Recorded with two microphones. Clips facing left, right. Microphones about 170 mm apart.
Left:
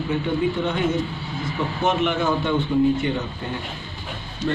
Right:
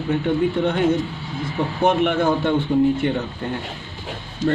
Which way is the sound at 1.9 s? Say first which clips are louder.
Right 3 dB; 60° right (ahead or behind).